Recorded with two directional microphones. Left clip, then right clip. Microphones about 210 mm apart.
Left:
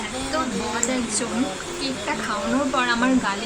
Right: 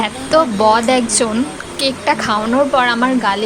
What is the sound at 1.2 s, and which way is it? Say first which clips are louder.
Speech: right 8 dB; 40° right (ahead or behind).